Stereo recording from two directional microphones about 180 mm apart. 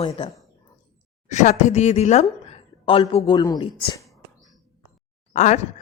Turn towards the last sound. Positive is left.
turn(degrees=40)  # may be behind; listen again after turning